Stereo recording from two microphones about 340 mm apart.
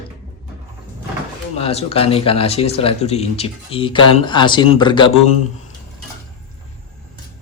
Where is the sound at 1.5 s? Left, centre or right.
Centre.